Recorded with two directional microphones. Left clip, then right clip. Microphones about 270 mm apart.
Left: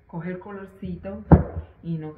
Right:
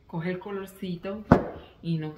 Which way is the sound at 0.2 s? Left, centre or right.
Centre.